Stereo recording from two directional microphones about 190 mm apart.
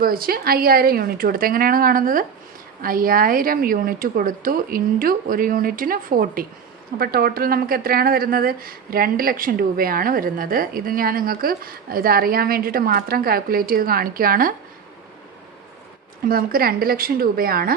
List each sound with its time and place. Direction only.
0.0 s speech: 50° right (ahead or behind)
16.2 s speech: 50° right (ahead or behind)